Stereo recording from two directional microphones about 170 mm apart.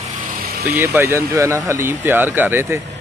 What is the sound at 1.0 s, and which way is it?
Speech, 15° right (ahead or behind).